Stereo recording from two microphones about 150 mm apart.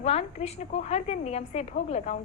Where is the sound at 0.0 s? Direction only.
45° left (ahead or behind).